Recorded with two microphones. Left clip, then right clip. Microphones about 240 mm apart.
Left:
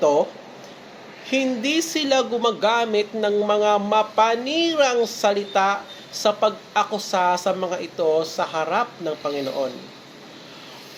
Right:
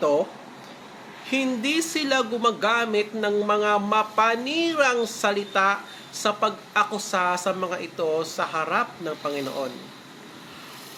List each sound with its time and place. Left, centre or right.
0.0 s speech: centre
1.3 s speech: centre